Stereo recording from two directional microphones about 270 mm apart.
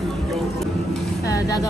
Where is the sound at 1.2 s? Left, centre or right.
Centre.